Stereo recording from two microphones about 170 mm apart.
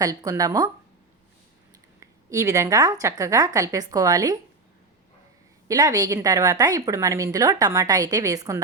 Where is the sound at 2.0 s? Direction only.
20° right (ahead or behind).